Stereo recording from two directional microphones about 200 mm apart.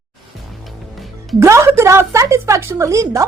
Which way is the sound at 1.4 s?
15° right (ahead or behind).